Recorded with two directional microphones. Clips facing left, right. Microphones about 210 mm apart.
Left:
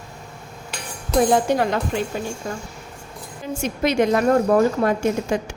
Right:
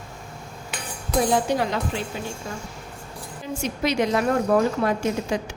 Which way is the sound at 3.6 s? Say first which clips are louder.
Left 4 dB; 50° left (ahead or behind).